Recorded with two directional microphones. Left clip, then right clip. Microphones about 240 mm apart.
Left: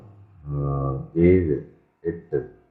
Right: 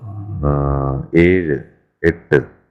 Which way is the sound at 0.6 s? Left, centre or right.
Right.